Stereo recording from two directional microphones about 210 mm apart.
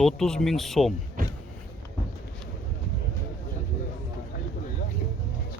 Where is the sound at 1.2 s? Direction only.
45° right (ahead or behind).